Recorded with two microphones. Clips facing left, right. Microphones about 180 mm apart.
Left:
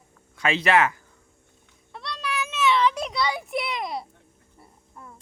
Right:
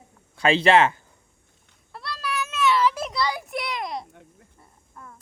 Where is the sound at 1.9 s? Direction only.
5° right (ahead or behind).